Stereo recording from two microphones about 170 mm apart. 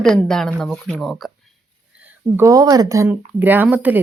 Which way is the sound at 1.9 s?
10° right (ahead or behind).